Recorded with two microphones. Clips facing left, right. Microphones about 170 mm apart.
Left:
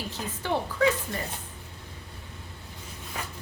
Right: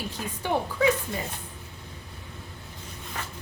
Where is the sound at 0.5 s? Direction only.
15° right (ahead or behind).